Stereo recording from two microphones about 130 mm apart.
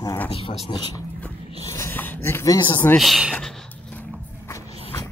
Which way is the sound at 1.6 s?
20° left (ahead or behind).